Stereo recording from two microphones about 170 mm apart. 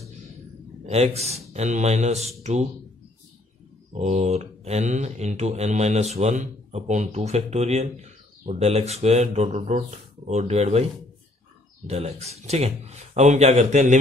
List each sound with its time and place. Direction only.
0.8 s speech: 40° right (ahead or behind)
3.9 s speech: 40° right (ahead or behind)
11.9 s speech: 40° right (ahead or behind)